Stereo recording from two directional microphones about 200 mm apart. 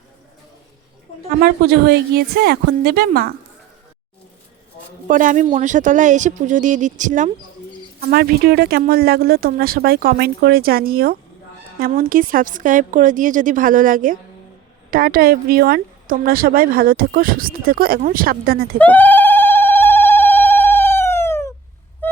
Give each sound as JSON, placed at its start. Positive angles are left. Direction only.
{"t": 1.4, "sound": "speech", "side_deg": -50}
{"t": 5.0, "sound": "speech", "side_deg": -40}
{"t": 8.0, "sound": "speech", "side_deg": -50}
{"t": 18.8, "sound": "telephone", "side_deg": 10}